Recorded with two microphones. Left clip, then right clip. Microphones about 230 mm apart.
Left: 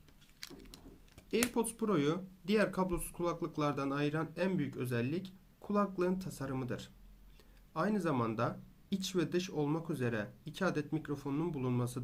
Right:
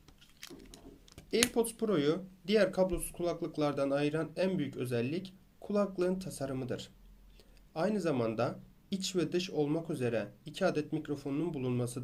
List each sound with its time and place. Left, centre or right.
1.5 s speech: left